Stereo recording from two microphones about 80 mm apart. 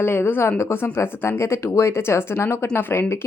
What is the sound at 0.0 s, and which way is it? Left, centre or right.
A woman's voice, left.